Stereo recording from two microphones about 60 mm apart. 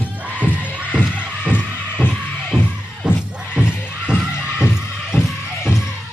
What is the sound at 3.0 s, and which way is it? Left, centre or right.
Music, centre.